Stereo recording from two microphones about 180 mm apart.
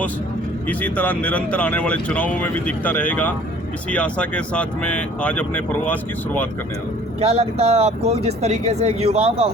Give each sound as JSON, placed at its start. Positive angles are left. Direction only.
{"t": 0.7, "sound": "speech", "side_deg": 10}
{"t": 7.2, "sound": "speech", "side_deg": -35}